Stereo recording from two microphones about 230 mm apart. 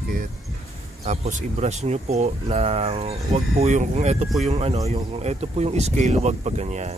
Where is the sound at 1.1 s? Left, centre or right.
Right.